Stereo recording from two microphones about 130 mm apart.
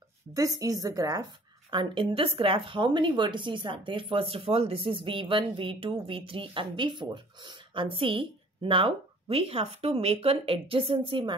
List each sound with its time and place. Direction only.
0.3 s a woman's voice: 25° right (ahead or behind)
1.7 s a woman's voice: 40° right (ahead or behind)